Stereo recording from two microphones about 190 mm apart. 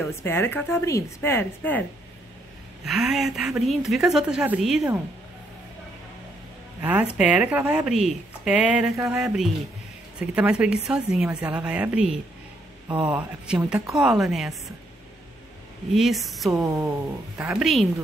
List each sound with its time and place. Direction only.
0.0 s a woman's voice: 15° left (ahead or behind)
2.8 s speech: centre (ahead or behind)
6.8 s speech: 10° right (ahead or behind)
13.5 s speech: 5° right (ahead or behind)
15.9 s speech: centre (ahead or behind)
16.6 s speech: 15° right (ahead or behind)
17.4 s speech: 5° right (ahead or behind)